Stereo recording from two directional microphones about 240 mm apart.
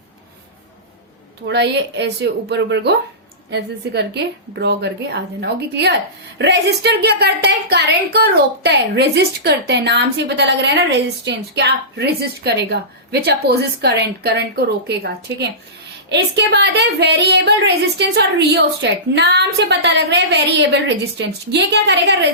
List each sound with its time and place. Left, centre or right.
1.5 s a woman's voice: right